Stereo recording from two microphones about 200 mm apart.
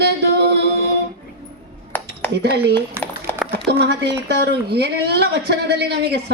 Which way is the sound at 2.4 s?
55° right (ahead or behind).